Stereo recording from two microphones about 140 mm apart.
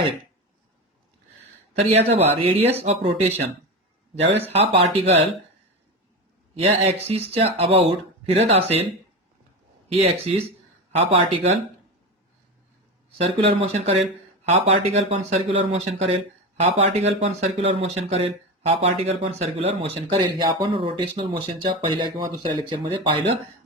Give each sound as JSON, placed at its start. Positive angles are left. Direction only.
{"t": 1.9, "sound": "speech", "side_deg": -45}
{"t": 6.6, "sound": "speech", "side_deg": -45}
{"t": 9.9, "sound": "speech", "side_deg": -45}
{"t": 13.1, "sound": "speech", "side_deg": -45}